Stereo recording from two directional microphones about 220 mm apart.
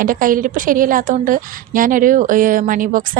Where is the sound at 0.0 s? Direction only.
40° right (ahead or behind).